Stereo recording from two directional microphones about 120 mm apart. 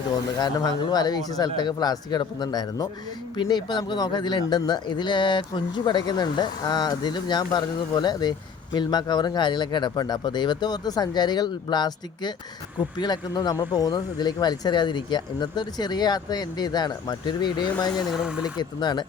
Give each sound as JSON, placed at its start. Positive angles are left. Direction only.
{"t": 0.3, "sound": "speech", "side_deg": 35}
{"t": 18.1, "sound": "speech", "side_deg": -5}
{"t": 18.5, "sound": "speech", "side_deg": 40}